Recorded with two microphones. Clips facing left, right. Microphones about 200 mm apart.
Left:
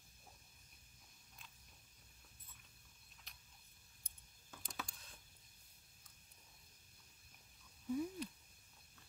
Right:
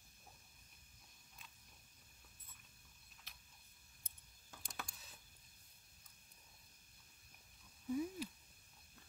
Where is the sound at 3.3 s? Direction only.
Centre (ahead or behind).